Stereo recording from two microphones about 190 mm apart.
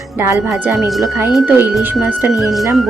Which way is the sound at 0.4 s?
Centre (ahead or behind).